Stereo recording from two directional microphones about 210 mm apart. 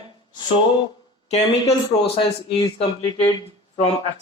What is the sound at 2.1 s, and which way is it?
Speech, 30° left (ahead or behind).